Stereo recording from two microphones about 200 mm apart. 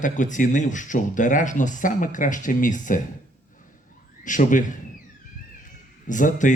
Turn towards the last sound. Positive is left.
turn(degrees=40)  # may be behind; listen again after turning